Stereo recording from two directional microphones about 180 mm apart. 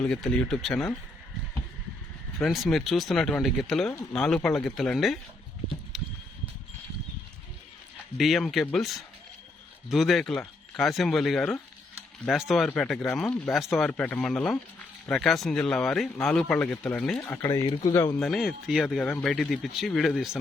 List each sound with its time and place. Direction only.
0.0 s speech: 5° left (ahead or behind)
2.4 s speech: centre (ahead or behind)
5.9 s a sound: centre (ahead or behind)
8.2 s speech: centre (ahead or behind); by 18.2 s 15° left (ahead or behind)
18.2 s speech: centre (ahead or behind)